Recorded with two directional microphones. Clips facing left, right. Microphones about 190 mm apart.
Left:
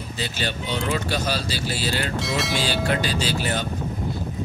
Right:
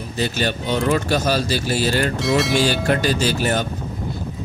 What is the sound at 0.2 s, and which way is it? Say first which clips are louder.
Speech: right 7 dB; 50° right (ahead or behind).